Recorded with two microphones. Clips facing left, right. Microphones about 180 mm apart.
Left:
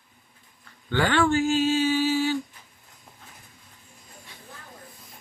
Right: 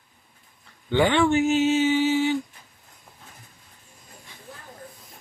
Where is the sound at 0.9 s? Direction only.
20° right (ahead or behind).